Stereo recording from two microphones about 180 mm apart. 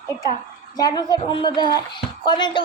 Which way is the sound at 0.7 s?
20° left (ahead or behind).